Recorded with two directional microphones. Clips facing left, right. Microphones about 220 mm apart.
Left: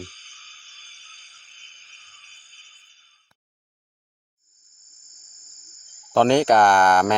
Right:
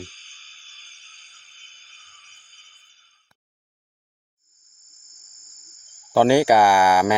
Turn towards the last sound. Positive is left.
turn(degrees=-10)  # may be behind; listen again after turning